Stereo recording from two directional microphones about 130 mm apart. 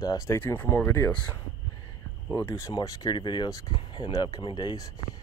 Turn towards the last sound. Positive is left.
turn(degrees=30)  # may be behind; listen again after turning